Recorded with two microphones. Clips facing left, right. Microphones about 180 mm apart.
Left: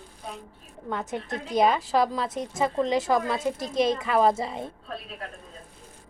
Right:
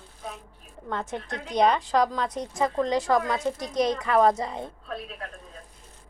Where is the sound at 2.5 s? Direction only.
25° left (ahead or behind).